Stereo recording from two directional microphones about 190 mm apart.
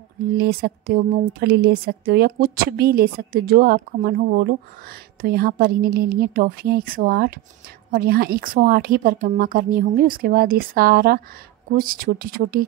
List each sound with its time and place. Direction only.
0.4 s a woman's voice: 55° right (ahead or behind)